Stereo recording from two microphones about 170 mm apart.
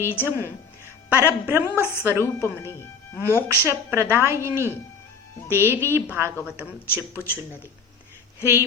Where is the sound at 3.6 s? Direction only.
15° right (ahead or behind).